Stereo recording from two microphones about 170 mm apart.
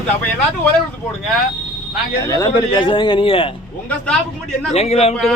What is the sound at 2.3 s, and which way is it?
A man's voice, 20° left (ahead or behind).